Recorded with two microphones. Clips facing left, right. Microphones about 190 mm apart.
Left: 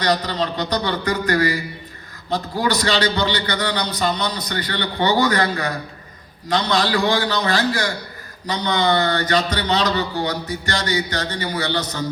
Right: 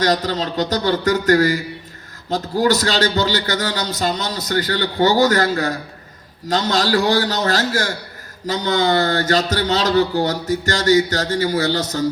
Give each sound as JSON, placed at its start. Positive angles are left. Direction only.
{"t": 0.0, "sound": "a man's voice", "side_deg": -45}